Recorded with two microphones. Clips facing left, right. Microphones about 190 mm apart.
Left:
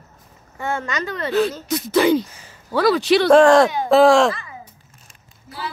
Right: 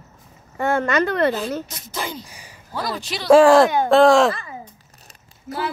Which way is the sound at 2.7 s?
75° left (ahead or behind).